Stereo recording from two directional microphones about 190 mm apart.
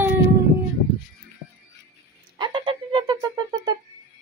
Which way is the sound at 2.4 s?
25° right (ahead or behind).